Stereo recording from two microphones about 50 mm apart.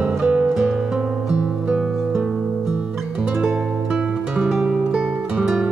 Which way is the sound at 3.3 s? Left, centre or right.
Centre.